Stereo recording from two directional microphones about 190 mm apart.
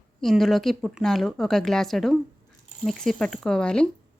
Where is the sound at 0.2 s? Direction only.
Centre (ahead or behind).